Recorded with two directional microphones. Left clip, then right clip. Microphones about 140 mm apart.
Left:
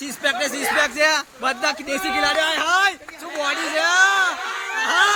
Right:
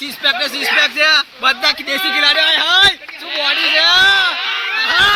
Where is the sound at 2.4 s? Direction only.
5° left (ahead or behind).